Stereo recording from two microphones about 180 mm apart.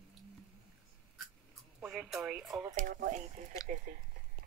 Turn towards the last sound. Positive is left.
turn(degrees=-50)  # may be behind; listen again after turning